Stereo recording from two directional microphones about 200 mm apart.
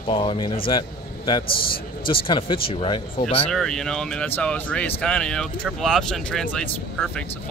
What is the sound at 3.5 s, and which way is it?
Speech, centre (ahead or behind).